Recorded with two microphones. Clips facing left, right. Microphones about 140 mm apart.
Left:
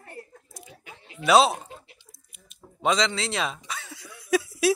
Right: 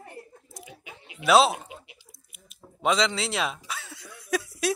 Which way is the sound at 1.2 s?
Centre (ahead or behind).